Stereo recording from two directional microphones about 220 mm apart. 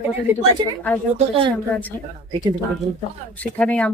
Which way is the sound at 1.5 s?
5° left (ahead or behind).